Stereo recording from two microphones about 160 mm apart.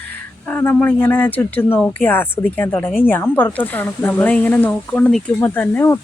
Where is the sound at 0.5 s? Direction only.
10° left (ahead or behind).